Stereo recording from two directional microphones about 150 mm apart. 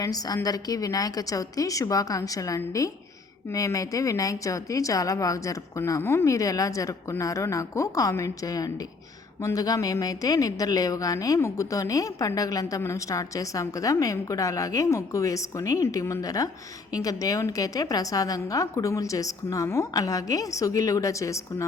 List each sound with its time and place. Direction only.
0.0 s a woman's voice: 25° left (ahead or behind)